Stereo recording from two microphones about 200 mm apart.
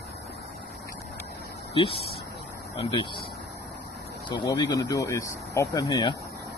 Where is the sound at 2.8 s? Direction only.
25° left (ahead or behind).